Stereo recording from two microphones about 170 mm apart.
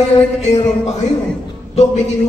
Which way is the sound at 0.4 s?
40° left (ahead or behind).